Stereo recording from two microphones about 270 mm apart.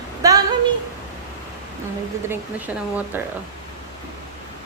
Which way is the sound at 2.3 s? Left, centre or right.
Centre.